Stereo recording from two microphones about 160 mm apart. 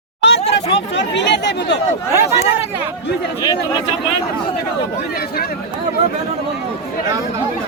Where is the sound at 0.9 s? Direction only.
90° left.